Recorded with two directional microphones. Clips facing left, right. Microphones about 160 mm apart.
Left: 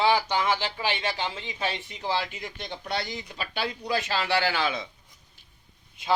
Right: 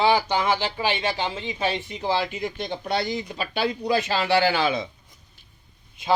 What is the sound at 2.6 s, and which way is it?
Speech, 30° right (ahead or behind).